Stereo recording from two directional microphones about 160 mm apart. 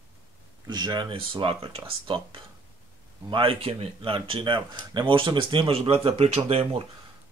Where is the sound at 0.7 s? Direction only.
25° right (ahead or behind).